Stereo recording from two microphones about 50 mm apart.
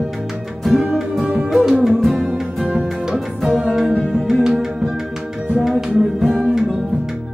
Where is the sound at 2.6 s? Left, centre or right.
Right.